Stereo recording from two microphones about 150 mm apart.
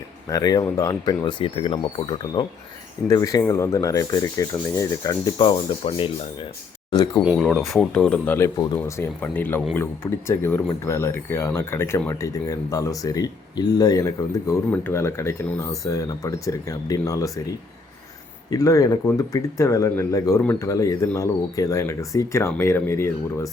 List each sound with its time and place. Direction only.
0.3 s speech: 25° left (ahead or behind)
5.4 s speech: 35° left (ahead or behind)
6.9 s speech: 25° left (ahead or behind)
7.3 s speech: centre (ahead or behind)
8.6 s speech: 25° left (ahead or behind)
9.2 s speech: 10° left (ahead or behind)
18.5 s speech: 20° left (ahead or behind)